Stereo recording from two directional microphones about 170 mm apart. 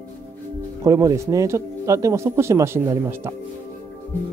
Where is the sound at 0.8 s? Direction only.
20° right (ahead or behind).